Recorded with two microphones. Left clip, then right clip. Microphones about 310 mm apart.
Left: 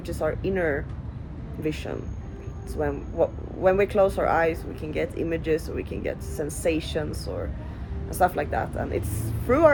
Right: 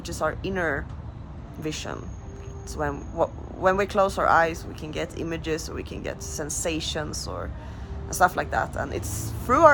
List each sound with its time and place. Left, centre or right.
0.0 s speech: centre